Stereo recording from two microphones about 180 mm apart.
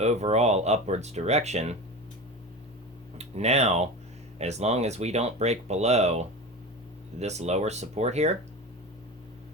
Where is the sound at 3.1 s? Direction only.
35° right (ahead or behind).